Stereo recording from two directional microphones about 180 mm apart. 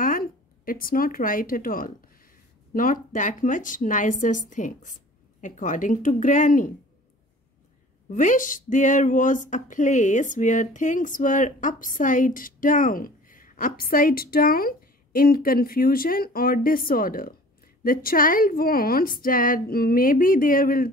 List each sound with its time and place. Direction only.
0.0 s speech: 50° left (ahead or behind)
8.1 s speech: 45° left (ahead or behind)